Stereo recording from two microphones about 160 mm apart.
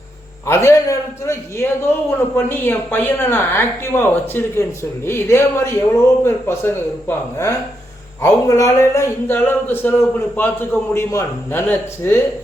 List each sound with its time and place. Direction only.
0.4 s a man's voice: 15° left (ahead or behind)
8.2 s a man's voice: 20° left (ahead or behind)